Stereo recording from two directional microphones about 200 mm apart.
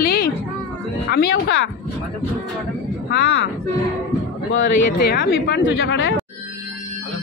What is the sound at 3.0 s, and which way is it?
Speech, 55° left (ahead or behind).